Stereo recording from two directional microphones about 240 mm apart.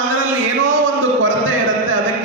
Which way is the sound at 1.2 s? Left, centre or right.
Right.